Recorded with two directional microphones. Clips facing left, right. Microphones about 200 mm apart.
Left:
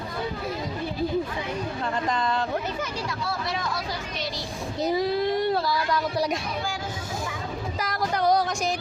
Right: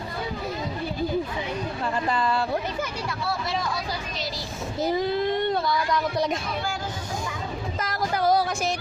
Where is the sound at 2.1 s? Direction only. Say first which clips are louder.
Right 2 dB; 10° right (ahead or behind).